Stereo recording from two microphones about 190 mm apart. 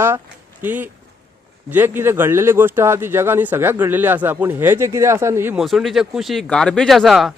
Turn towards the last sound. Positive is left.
turn(degrees=0)  # may be behind; listen again after turning